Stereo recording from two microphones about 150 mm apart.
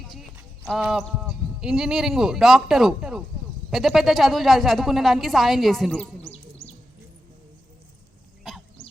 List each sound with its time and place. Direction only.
0.1 s a woman's voice: centre (ahead or behind)
6.3 s bird: 45° left (ahead or behind)